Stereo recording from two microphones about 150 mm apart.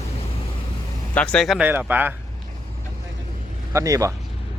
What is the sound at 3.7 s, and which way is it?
Speech, 20° right (ahead or behind).